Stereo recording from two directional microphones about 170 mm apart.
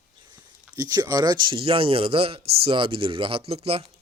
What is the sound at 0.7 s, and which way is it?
A man's voice, 20° right (ahead or behind).